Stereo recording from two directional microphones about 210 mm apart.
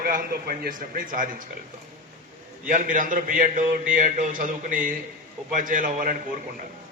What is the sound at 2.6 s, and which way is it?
A man's voice, 40° right (ahead or behind).